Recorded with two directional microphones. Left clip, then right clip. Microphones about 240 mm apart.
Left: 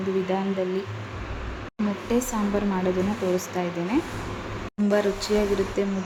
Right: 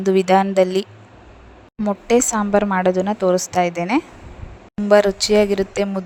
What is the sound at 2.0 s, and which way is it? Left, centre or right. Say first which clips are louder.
Speech: right 10 dB; right.